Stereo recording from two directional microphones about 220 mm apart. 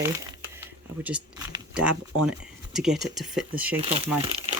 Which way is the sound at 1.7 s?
5° right (ahead or behind).